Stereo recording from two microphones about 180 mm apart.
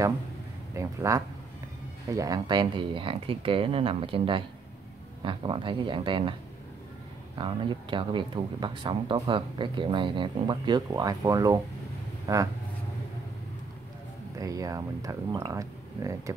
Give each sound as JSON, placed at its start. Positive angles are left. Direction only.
{"t": 0.7, "sound": "speech", "side_deg": -15}
{"t": 7.3, "sound": "speech", "side_deg": -25}
{"t": 14.4, "sound": "speech", "side_deg": -20}